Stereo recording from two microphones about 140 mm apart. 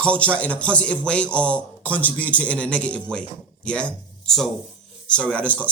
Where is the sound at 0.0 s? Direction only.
10° left (ahead or behind).